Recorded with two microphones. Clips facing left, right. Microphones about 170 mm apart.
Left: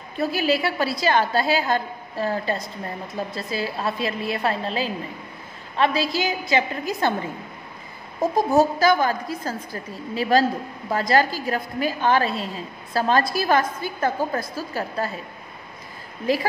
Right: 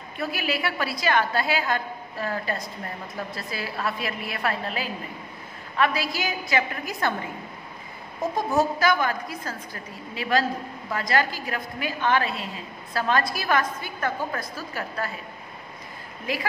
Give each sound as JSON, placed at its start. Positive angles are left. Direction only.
{"t": 0.2, "sound": "a woman's voice", "side_deg": 30}
{"t": 8.4, "sound": "a woman's voice", "side_deg": 35}
{"t": 16.3, "sound": "a woman's voice", "side_deg": 30}